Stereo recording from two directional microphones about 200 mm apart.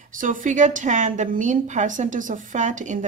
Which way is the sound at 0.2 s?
40° right (ahead or behind).